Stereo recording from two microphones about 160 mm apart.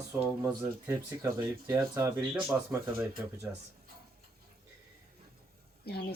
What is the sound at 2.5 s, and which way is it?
Speech, 5° right (ahead or behind).